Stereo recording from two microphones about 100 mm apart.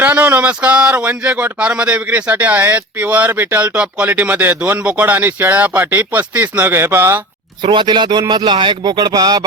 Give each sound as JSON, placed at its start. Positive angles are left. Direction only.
{"t": 0.0, "sound": "speech", "side_deg": -20}
{"t": 7.6, "sound": "speech", "side_deg": -50}